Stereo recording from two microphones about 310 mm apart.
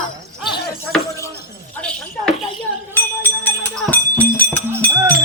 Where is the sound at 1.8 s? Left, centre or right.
Centre.